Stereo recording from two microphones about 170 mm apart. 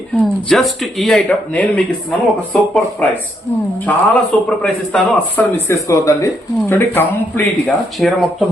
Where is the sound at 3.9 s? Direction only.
10° left (ahead or behind).